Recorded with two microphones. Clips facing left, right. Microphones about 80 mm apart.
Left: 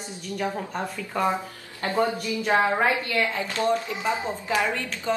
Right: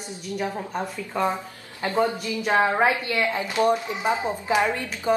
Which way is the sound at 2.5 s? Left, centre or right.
Centre.